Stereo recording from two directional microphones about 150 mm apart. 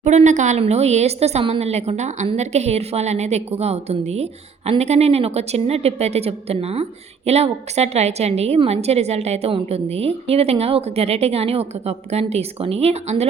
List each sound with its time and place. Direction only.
0.0 s a woman's voice: 50° right (ahead or behind)